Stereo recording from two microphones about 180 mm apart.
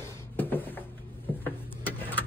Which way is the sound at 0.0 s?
10° left (ahead or behind).